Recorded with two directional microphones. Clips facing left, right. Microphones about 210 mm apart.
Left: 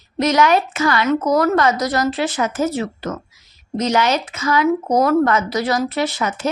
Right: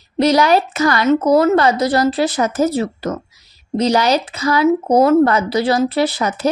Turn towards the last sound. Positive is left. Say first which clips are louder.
# right 4 dB
turn(degrees=-35)  # may be behind; listen again after turning